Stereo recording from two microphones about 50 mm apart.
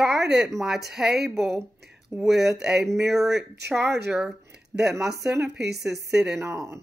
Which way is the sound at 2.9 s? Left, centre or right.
Centre.